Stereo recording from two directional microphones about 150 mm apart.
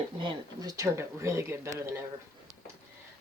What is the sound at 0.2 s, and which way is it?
Speech, 25° right (ahead or behind).